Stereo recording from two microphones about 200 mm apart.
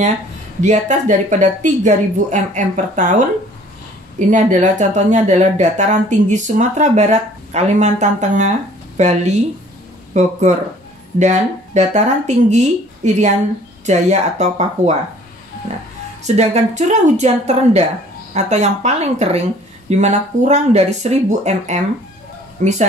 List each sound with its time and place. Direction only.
0.6 s speech: 35° right (ahead or behind)
4.3 s speech: 40° right (ahead or behind)
16.3 s speech: 35° right (ahead or behind)